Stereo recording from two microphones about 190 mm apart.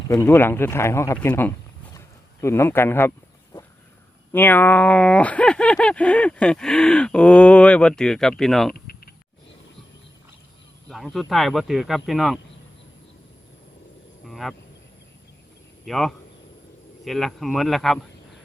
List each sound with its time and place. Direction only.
0.1 s speech: 15° left (ahead or behind)
4.3 s speech: 10° left (ahead or behind)
8.7 s a sound: 50° left (ahead or behind)
10.8 s speech: centre (ahead or behind)
14.3 s a sound: centre (ahead or behind)
15.9 s speech: centre (ahead or behind)